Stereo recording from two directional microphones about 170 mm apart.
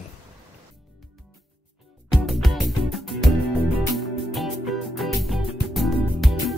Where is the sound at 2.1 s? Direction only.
Centre (ahead or behind).